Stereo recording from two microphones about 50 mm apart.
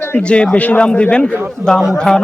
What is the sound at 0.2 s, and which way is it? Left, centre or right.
Speech, left.